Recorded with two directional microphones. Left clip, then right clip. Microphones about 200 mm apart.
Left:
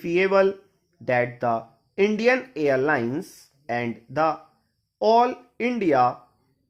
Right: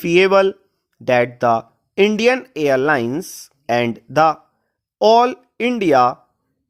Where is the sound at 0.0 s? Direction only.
45° right (ahead or behind).